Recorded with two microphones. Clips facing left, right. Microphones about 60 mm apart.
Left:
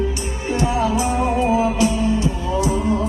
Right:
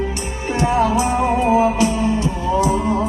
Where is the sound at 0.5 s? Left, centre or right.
Right.